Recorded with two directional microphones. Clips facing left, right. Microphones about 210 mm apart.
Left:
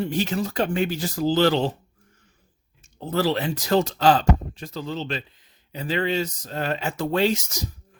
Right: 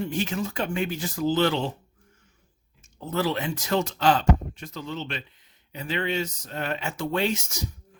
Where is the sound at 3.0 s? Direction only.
35° left (ahead or behind).